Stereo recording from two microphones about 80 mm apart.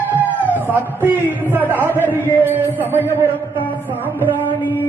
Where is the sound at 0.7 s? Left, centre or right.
Right.